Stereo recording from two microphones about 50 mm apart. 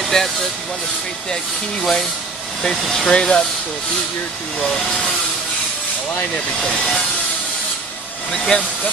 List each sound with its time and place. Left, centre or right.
0.0 s vehicle: centre
1.3 s speech: centre
3.0 s speech: centre
4.6 s speech: centre
8.3 s speech: centre